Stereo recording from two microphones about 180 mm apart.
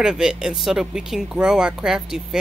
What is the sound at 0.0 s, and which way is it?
Speech, 5° right (ahead or behind).